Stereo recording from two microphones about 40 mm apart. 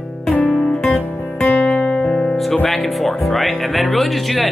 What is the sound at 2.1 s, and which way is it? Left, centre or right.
Music, centre.